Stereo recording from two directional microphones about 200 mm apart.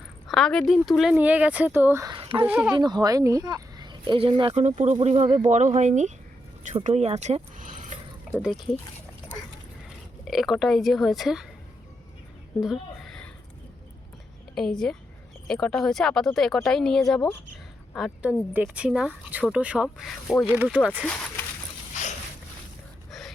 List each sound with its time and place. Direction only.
0.3 s speech: centre (ahead or behind)
2.1 s a sound: 25° right (ahead or behind)
2.4 s speech: 5° right (ahead or behind)
2.7 s speech: 20° right (ahead or behind)
5.5 s speech: 35° right (ahead or behind)
8.4 s speech: centre (ahead or behind)
10.2 s speech: centre (ahead or behind)
12.5 s a sound: centre (ahead or behind)
14.5 s speech: 5° left (ahead or behind)